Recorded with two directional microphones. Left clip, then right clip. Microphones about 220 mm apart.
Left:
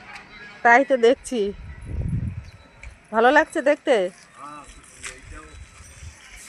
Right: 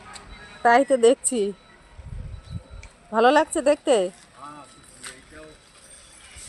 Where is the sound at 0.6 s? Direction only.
Centre (ahead or behind).